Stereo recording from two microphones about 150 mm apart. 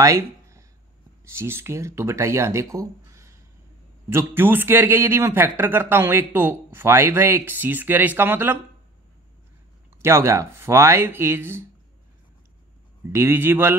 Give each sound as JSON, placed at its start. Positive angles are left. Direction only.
{"t": 0.0, "sound": "a sound", "side_deg": -20}
{"t": 1.4, "sound": "speech", "side_deg": -15}
{"t": 10.0, "sound": "speech", "side_deg": -15}
{"t": 13.1, "sound": "speech", "side_deg": -15}